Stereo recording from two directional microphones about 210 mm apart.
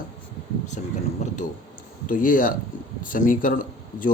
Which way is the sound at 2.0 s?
40° left (ahead or behind).